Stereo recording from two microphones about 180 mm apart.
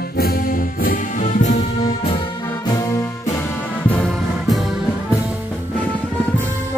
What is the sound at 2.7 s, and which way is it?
Music, 20° left (ahead or behind).